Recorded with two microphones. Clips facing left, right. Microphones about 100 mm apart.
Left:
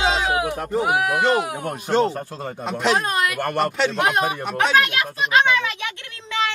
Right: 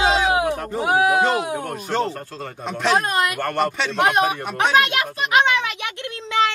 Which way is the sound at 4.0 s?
20° right (ahead or behind).